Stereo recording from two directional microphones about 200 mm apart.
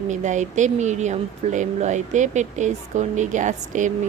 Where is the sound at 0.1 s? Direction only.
35° right (ahead or behind).